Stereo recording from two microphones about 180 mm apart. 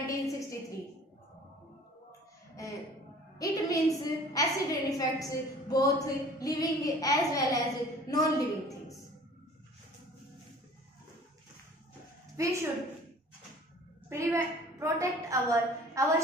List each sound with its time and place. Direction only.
0.0 s a woman's voice: 15° left (ahead or behind)
3.3 s a woman's voice: 20° left (ahead or behind)
12.4 s a woman's voice: 15° right (ahead or behind)
14.0 s a woman's voice: 15° right (ahead or behind)